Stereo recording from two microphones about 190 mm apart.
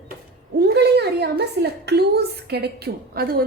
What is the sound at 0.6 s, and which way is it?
Speech, 60° right (ahead or behind).